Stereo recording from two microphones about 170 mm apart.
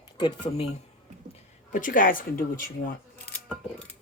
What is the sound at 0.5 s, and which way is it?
Speech, 40° left (ahead or behind).